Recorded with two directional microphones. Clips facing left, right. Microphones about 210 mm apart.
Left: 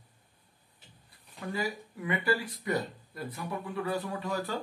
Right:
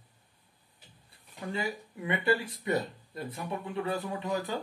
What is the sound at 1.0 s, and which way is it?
Speech, 25° right (ahead or behind).